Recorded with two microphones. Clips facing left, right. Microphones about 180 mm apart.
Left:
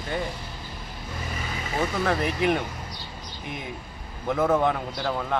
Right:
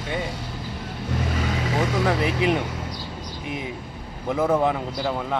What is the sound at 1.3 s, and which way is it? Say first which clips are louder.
Vehicle: right 6 dB; 75° right (ahead or behind).